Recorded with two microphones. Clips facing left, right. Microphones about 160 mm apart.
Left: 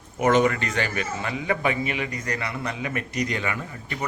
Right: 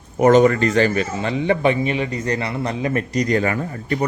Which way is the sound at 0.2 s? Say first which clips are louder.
Right 7 dB; 35° right (ahead or behind).